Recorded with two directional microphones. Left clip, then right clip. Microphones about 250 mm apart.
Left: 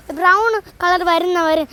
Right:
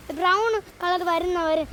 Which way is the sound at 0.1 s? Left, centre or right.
Left.